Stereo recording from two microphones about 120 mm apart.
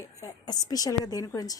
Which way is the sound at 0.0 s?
30° left (ahead or behind).